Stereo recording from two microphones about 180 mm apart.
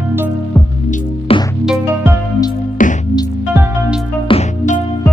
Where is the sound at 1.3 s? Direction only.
30° left (ahead or behind).